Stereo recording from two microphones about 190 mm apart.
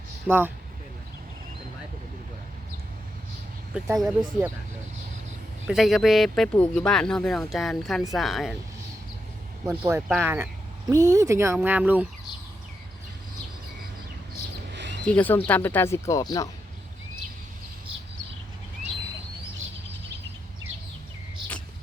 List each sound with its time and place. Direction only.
0.3 s speech: 10° right (ahead or behind)
3.8 s speech: centre (ahead or behind)
5.6 s speech: centre (ahead or behind)
9.6 s speech: 15° right (ahead or behind)
14.7 s a sound: 65° right (ahead or behind)
15.0 s speech: 5° left (ahead or behind)